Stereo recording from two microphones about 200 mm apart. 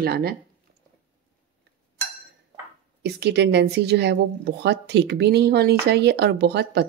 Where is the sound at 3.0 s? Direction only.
60° right (ahead or behind).